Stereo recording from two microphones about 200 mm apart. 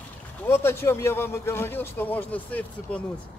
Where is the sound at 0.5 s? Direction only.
10° left (ahead or behind).